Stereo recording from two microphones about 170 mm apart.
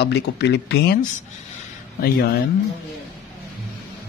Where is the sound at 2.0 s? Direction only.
65° left (ahead or behind).